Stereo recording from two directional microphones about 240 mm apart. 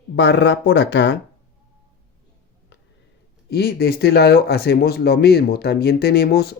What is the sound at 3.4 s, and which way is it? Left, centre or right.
Speech, left.